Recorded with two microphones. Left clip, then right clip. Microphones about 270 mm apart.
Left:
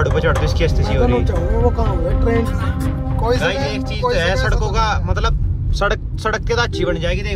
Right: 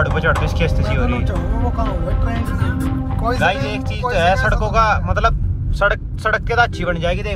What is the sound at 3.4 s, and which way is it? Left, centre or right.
Speech, centre.